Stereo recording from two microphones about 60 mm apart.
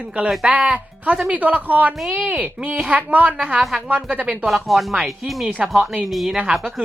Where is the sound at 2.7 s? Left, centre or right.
Centre.